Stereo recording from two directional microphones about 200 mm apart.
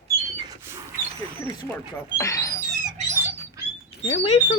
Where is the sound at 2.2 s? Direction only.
15° left (ahead or behind).